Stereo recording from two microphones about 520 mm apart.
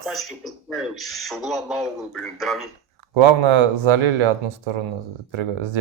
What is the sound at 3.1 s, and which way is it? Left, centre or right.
Speech, right.